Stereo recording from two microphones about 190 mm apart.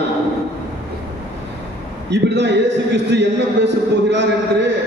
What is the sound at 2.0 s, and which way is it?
A man's voice, 65° right (ahead or behind).